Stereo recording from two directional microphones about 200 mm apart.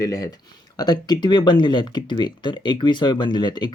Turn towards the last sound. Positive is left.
turn(degrees=20)  # may be behind; listen again after turning